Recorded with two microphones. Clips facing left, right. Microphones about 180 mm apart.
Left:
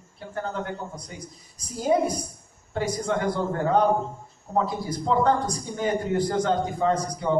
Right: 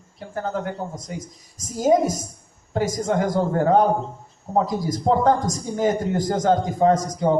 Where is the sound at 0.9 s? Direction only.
45° right (ahead or behind).